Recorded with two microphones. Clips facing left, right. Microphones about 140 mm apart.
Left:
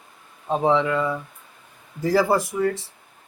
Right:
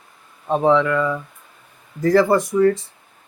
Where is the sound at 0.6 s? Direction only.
15° left (ahead or behind).